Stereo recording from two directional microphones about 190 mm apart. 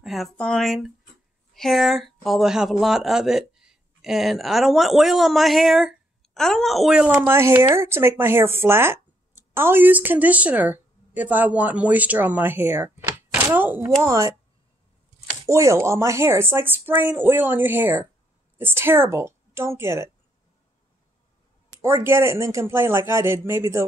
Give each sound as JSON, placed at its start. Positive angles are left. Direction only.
{"t": 0.0, "sound": "a woman's voice", "side_deg": 0}
{"t": 15.4, "sound": "a woman's voice", "side_deg": -15}
{"t": 21.8, "sound": "a woman's voice", "side_deg": -10}